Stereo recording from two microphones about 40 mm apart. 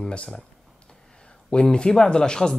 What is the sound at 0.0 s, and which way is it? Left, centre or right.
Speech, left.